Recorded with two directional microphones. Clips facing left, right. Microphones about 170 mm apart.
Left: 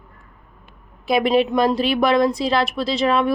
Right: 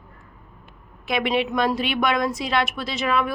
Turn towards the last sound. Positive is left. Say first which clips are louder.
# left 5 dB
turn(degrees=30)  # may be behind; listen again after turning